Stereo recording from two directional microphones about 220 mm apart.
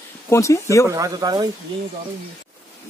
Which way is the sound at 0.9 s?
15° right (ahead or behind).